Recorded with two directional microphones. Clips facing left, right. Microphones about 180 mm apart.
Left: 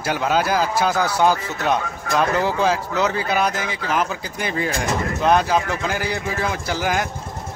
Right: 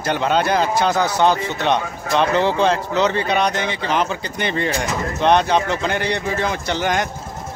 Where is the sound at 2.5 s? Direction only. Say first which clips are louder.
Right 2 dB; 5° left (ahead or behind).